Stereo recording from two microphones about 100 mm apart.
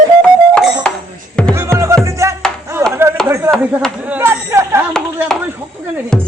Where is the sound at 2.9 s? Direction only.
25° right (ahead or behind).